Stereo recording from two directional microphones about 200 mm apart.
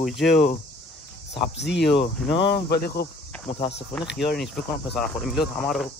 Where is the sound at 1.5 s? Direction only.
60° left (ahead or behind).